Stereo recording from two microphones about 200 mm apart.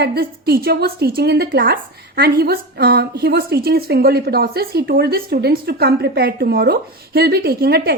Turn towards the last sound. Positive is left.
turn(degrees=-50)  # may be behind; listen again after turning